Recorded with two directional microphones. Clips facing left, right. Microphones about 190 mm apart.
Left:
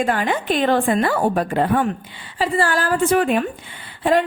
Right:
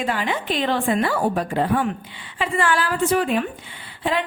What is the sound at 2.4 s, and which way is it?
A woman's voice, 35° left (ahead or behind).